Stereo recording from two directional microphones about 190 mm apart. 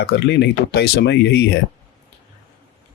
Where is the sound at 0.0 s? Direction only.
60° left (ahead or behind).